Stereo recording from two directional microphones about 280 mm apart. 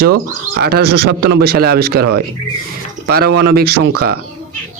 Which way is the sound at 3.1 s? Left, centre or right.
Right.